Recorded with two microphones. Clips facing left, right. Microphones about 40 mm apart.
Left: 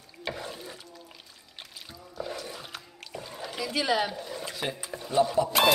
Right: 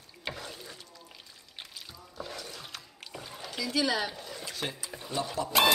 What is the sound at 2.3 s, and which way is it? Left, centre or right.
Music, centre.